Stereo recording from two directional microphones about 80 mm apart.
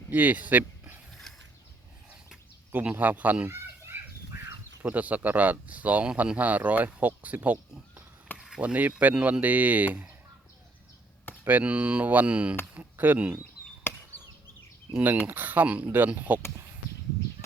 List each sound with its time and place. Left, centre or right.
0.1 s speech: right
1.3 s pulleys: centre
2.7 s speech: right
11.4 s speech: centre
13.9 s chop: left
14.9 s speech: right